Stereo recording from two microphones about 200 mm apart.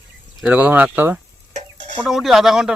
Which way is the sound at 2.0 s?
Centre (ahead or behind).